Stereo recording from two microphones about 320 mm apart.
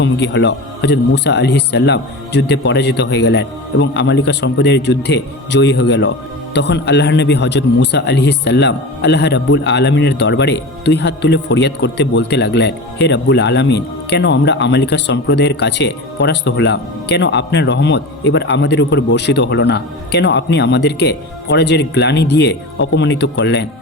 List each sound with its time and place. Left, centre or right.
0.0 s speech: left